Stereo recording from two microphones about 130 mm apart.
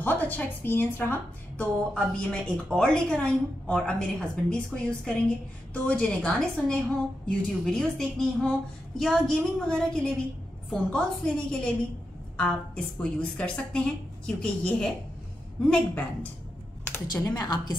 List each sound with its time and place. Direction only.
0.0 s a woman's voice: 15° left (ahead or behind)
17.1 s speech: 30° left (ahead or behind)